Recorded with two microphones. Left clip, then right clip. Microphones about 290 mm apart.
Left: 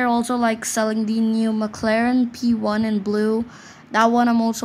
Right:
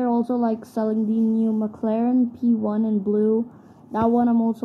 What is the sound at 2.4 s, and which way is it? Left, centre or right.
Speech, left.